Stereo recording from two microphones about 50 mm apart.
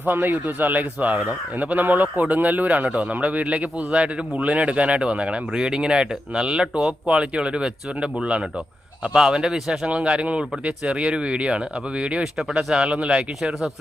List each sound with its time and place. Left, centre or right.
0.0 s speech: right; by 6.9 s centre
7.1 s speech: right
12.2 s speech: centre